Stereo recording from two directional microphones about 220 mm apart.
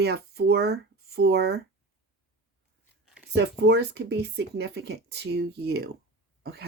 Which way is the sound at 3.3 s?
50° right (ahead or behind).